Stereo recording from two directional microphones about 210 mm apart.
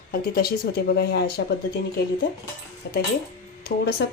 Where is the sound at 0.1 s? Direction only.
45° left (ahead or behind).